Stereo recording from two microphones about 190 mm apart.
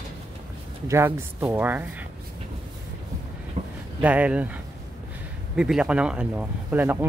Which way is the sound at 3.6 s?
35° right (ahead or behind).